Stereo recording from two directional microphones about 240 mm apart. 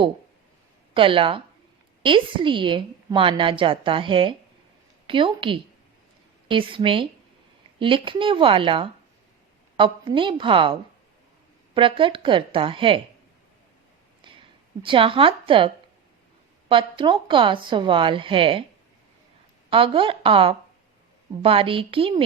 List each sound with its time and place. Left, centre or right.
0.9 s a woman's voice: right
14.2 s a sound: right
14.8 s a woman's voice: right
19.7 s a woman's voice: right